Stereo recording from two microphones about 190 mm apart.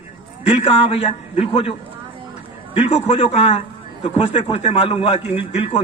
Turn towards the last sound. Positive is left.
turn(degrees=30)  # may be behind; listen again after turning